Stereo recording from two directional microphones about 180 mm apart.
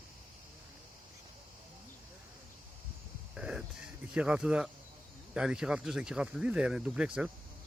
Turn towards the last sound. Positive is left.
turn(degrees=-5)  # may be behind; listen again after turning